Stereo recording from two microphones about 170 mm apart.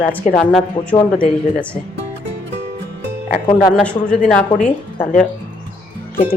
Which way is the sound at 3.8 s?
5° left (ahead or behind).